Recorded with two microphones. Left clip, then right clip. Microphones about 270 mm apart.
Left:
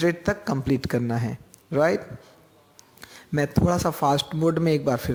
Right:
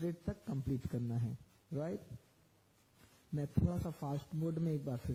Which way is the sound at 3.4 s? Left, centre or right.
Centre.